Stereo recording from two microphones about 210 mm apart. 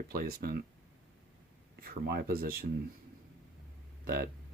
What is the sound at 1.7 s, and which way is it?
Speech, 50° right (ahead or behind).